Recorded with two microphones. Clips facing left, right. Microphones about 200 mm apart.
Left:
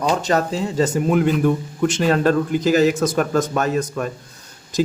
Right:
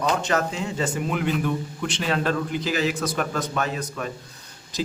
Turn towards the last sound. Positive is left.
turn(degrees=45)  # may be behind; listen again after turning